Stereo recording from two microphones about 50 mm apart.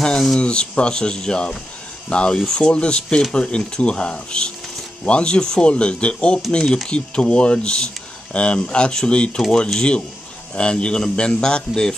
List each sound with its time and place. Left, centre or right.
0.0 s rub: centre
0.4 s speech: left
2.4 s speech: centre